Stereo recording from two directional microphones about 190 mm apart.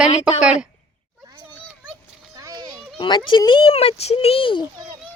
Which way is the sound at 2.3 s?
20° right (ahead or behind).